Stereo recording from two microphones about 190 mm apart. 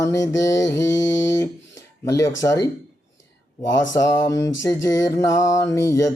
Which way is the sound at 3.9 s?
20° left (ahead or behind).